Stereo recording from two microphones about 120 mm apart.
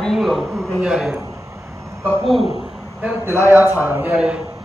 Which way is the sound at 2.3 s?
Centre (ahead or behind).